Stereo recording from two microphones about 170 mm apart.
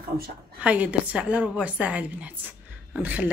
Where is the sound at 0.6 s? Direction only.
10° right (ahead or behind).